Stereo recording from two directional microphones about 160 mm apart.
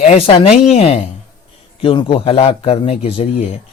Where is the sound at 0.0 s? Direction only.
45° left (ahead or behind).